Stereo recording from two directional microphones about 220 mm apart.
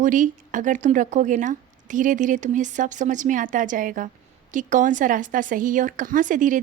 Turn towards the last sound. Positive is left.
turn(degrees=-35)  # may be behind; listen again after turning